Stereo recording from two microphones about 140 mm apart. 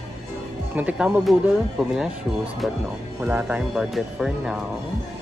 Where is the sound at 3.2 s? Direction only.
5° right (ahead or behind).